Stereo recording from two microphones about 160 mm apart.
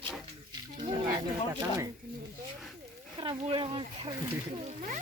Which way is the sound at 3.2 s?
35° right (ahead or behind).